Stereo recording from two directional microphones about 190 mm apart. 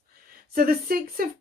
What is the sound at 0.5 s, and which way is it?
Speech, 50° right (ahead or behind).